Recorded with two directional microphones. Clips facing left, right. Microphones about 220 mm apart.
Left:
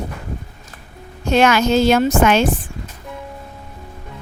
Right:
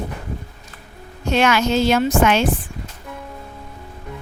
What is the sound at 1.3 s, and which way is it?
A woman's voice, 45° left (ahead or behind).